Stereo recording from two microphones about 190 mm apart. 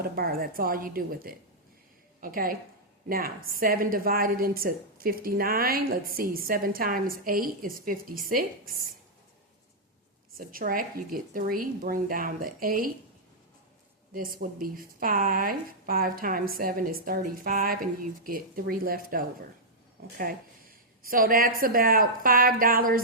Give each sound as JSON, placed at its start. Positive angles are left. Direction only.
{"t": 0.0, "sound": "a woman's voice", "side_deg": -50}
{"t": 10.3, "sound": "a woman's voice", "side_deg": -50}
{"t": 14.1, "sound": "a woman's voice", "side_deg": -50}